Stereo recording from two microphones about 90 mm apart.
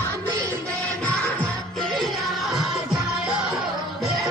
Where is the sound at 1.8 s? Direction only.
5° left (ahead or behind).